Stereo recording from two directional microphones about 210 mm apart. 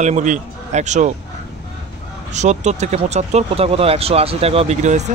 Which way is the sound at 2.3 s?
35° right (ahead or behind).